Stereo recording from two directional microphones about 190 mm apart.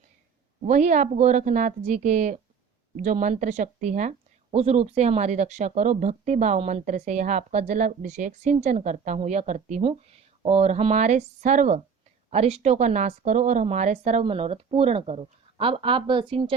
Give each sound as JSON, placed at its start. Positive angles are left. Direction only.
{"t": 0.6, "sound": "speech", "side_deg": -40}